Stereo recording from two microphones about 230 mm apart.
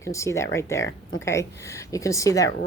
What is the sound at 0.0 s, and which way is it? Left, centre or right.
Speech, centre.